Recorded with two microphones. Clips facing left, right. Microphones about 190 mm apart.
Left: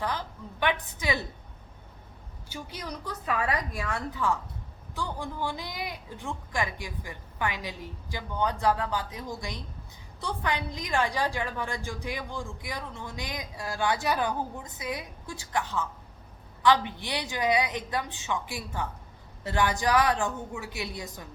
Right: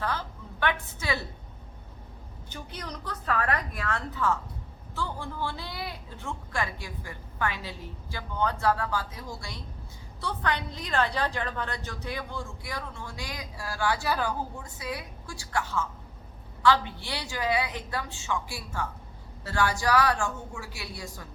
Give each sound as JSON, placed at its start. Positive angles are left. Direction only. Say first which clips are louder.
{"t": 0.0, "sound": "a woman's voice", "louder": "even", "side_deg": 15}
{"t": 2.5, "sound": "a woman's voice", "louder": "left 2 dB", "side_deg": 10}